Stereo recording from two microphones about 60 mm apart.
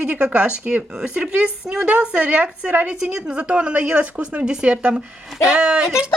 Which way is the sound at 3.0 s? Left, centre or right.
Centre.